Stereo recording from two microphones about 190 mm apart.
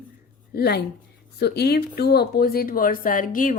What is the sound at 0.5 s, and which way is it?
Speech, 55° left (ahead or behind).